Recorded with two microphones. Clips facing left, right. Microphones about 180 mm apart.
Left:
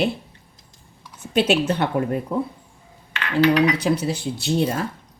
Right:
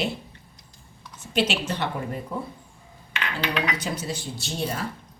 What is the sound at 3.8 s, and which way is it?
Speech, 60° left (ahead or behind).